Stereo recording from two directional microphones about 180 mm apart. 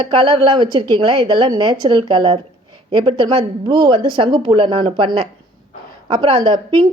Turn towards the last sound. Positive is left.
turn(degrees=-25)  # may be behind; listen again after turning